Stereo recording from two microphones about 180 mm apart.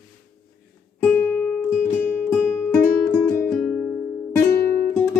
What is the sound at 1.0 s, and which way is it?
Music, 15° left (ahead or behind).